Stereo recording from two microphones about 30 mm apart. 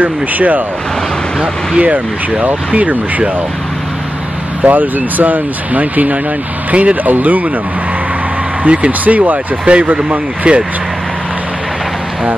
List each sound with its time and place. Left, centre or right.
0.0 s speech: right
1.8 s speech: right
4.6 s speech: right
6.7 s speech: right
7.1 s speech: right
8.7 s speech: right
9.7 s speech: right